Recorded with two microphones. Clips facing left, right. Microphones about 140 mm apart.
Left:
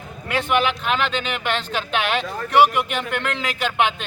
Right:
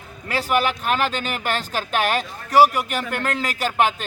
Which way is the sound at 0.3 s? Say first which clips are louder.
Left 1 dB; 35° right (ahead or behind).